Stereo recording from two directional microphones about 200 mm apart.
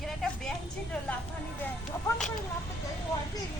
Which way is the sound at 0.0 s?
Centre (ahead or behind).